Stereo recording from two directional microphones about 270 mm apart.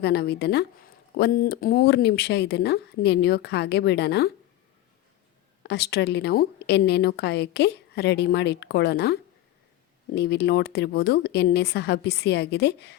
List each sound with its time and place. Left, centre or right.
0.0 s speech: left
5.6 s speech: left
10.2 s speech: left